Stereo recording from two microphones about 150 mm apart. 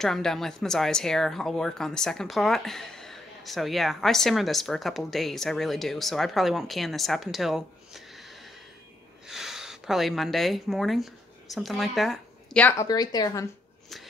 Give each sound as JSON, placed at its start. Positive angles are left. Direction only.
{"t": 0.0, "sound": "speech", "side_deg": 0}
{"t": 9.3, "sound": "speech", "side_deg": 0}
{"t": 12.6, "sound": "a woman's voice", "side_deg": 20}